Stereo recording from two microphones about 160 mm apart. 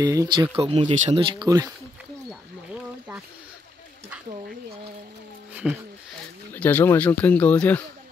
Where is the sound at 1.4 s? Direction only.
20° right (ahead or behind).